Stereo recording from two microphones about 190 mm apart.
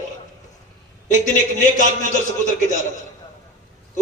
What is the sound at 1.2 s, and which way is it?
Speech, 40° left (ahead or behind).